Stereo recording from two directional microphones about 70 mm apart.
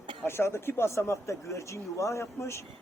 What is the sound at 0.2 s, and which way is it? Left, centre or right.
Speech, left.